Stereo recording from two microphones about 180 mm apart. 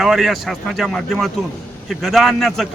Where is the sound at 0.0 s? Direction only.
Centre (ahead or behind).